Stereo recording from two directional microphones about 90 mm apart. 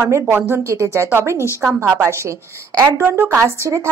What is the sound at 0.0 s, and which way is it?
A woman's voice, 30° right (ahead or behind).